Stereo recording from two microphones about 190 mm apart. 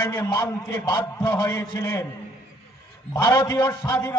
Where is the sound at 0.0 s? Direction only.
15° left (ahead or behind).